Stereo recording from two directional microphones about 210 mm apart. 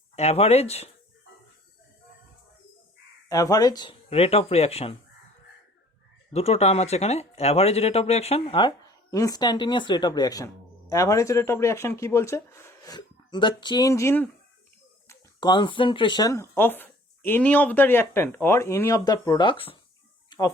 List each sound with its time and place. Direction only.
0.2 s speech: 30° left (ahead or behind)
3.2 s speech: 15° left (ahead or behind)
6.3 s speech: 30° left (ahead or behind)
20.3 s a sound: 20° left (ahead or behind)